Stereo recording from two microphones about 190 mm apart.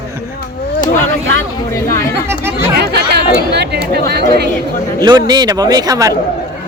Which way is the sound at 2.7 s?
60° right (ahead or behind).